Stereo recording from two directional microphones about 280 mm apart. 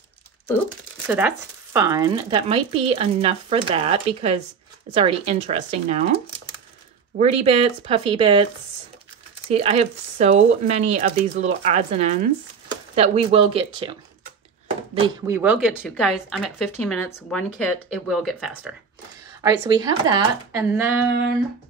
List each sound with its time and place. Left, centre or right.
1.0 s speech: centre
9.5 s speech: right
15.0 s speech: centre
19.4 s speech: centre